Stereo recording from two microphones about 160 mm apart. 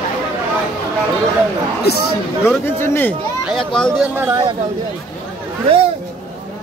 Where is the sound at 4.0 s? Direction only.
15° right (ahead or behind).